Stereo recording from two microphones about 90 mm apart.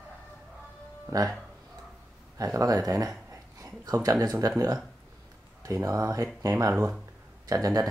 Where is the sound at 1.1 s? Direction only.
40° right (ahead or behind).